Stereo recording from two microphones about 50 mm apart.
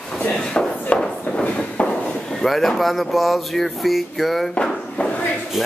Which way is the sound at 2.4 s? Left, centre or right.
Centre.